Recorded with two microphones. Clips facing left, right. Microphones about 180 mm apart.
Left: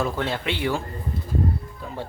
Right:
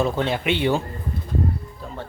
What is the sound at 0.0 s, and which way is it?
Speech, 20° right (ahead or behind).